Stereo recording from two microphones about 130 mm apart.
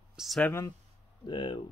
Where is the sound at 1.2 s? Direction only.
35° left (ahead or behind).